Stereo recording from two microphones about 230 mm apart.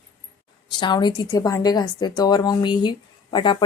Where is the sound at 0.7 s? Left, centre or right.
Centre.